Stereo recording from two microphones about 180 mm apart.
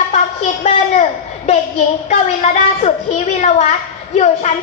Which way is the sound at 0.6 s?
35° left (ahead or behind).